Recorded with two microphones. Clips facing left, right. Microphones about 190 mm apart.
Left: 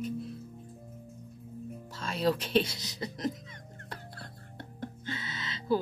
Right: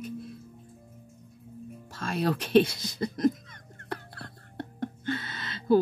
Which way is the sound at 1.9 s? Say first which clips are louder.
Right 1 dB; 55° right (ahead or behind).